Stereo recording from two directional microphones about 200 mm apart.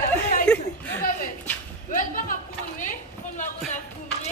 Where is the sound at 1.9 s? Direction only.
40° left (ahead or behind).